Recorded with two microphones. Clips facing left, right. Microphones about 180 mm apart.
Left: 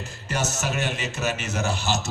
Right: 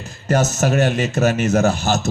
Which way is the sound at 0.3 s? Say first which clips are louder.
Right 10 dB; 45° right (ahead or behind).